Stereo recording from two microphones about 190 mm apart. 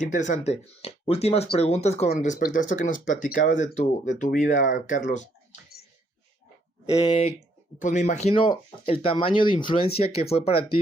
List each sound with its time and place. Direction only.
0.1 s speech: 40° left (ahead or behind)
6.9 s speech: 30° left (ahead or behind)